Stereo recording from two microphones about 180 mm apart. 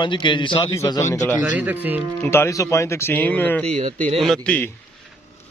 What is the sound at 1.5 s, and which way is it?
Speech, 10° right (ahead or behind).